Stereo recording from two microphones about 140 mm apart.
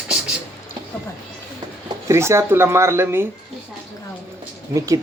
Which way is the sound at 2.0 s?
20° right (ahead or behind).